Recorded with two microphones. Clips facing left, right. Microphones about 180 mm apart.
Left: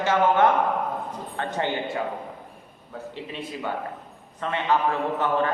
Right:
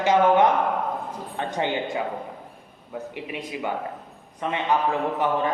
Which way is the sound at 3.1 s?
15° right (ahead or behind).